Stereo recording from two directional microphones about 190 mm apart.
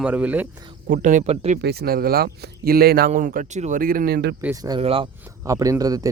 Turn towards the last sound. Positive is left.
turn(degrees=-20)  # may be behind; listen again after turning